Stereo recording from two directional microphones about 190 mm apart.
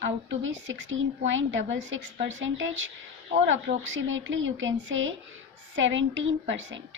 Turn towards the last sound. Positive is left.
turn(degrees=-80)